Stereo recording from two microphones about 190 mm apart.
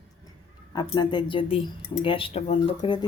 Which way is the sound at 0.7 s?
25° left (ahead or behind).